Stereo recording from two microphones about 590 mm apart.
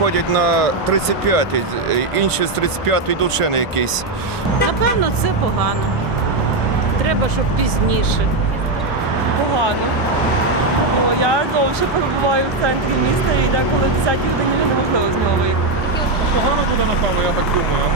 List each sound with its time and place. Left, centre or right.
1.0 s speech: right